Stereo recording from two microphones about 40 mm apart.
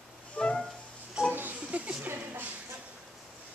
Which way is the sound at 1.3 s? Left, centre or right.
Right.